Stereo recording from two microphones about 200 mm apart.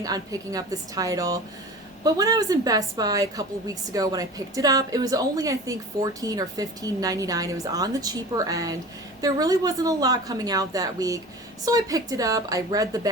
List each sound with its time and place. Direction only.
0.0 s a woman's voice: 20° right (ahead or behind)